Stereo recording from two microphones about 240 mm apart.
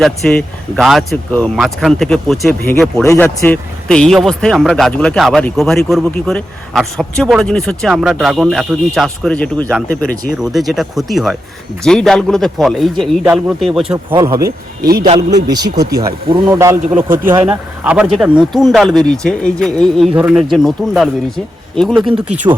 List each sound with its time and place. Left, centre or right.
0.0 s speech: centre
14.1 s a man's voice: centre
14.8 s a man's voice: right
15.0 s a man's voice: centre